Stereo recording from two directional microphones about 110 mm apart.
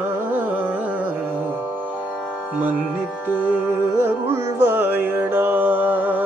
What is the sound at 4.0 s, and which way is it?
Music, 25° right (ahead or behind).